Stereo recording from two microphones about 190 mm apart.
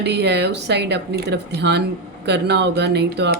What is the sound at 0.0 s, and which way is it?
Speech, 60° right (ahead or behind).